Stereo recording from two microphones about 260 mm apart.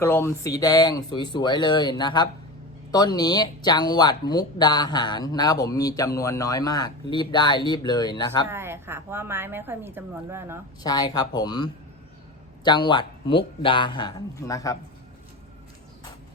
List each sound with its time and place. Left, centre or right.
0.0 s speech: centre
8.4 s a woman's voice: centre
10.8 s speech: centre